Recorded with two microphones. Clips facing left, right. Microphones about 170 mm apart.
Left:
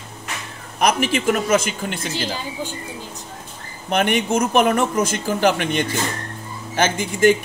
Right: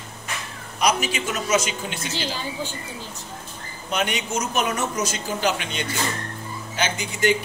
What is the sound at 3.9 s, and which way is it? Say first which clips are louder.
Speech: left 7 dB; 55° left (ahead or behind).